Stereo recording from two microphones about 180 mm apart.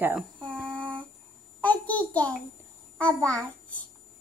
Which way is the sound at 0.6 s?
5° left (ahead or behind).